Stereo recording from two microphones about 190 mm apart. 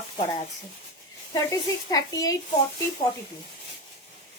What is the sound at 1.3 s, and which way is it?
Speech, 20° left (ahead or behind).